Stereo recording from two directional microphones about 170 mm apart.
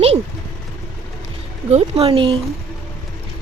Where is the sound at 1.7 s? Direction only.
35° right (ahead or behind).